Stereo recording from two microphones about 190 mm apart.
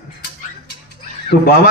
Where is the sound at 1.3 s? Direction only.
60° left (ahead or behind).